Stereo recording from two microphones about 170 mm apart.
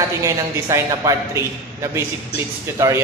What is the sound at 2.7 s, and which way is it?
Speech, 20° right (ahead or behind).